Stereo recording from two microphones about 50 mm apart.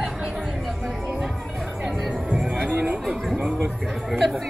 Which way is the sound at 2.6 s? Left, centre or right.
Right.